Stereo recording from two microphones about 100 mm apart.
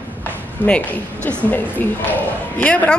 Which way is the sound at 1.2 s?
15° left (ahead or behind).